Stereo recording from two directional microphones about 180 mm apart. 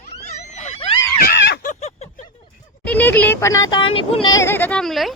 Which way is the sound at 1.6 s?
40° left (ahead or behind).